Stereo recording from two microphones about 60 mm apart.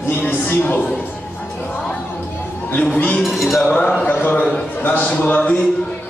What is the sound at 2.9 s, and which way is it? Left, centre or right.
Speech, left.